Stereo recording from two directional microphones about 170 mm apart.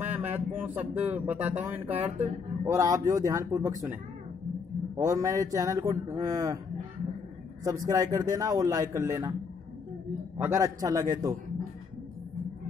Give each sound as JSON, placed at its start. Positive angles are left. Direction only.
{"t": 0.0, "sound": "a man's voice", "side_deg": -10}
{"t": 7.6, "sound": "a man's voice", "side_deg": -20}
{"t": 10.3, "sound": "a man's voice", "side_deg": -15}